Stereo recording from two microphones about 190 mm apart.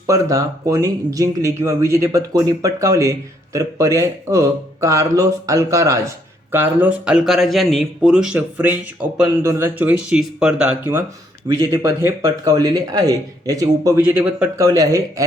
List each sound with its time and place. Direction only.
0.1 s speech: 15° right (ahead or behind)
14.0 s speech: 10° right (ahead or behind)